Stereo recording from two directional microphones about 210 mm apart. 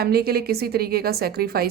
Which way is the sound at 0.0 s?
45° right (ahead or behind).